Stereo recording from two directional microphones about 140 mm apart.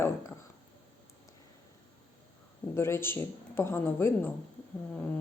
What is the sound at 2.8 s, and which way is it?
A woman's voice, 20° left (ahead or behind).